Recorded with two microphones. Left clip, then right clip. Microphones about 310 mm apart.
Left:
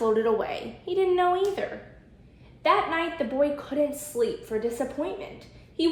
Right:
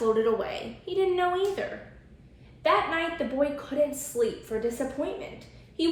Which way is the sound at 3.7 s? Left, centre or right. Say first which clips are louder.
Even; centre.